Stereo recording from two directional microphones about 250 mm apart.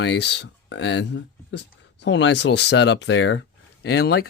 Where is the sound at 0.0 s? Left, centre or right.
Left.